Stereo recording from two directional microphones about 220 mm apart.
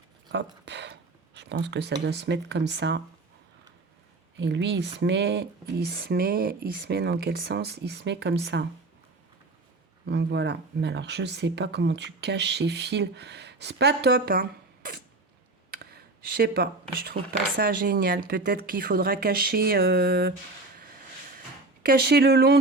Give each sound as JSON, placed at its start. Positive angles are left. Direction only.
{"t": 0.3, "sound": "speech", "side_deg": -50}
{"t": 4.4, "sound": "speech", "side_deg": -50}
{"t": 10.1, "sound": "speech", "side_deg": -50}
{"t": 15.7, "sound": "a sound", "side_deg": -45}
{"t": 17.3, "sound": "speech", "side_deg": -40}
{"t": 21.8, "sound": "speech", "side_deg": -45}